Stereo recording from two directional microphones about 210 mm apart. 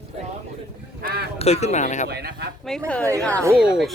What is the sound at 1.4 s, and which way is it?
Speech, 30° left (ahead or behind).